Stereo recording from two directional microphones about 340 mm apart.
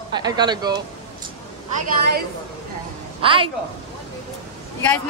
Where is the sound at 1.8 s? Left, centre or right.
Right.